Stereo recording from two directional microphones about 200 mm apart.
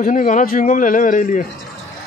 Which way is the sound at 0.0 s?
40° left (ahead or behind).